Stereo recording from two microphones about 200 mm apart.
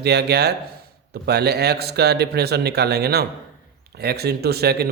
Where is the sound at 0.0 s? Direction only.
55° right (ahead or behind).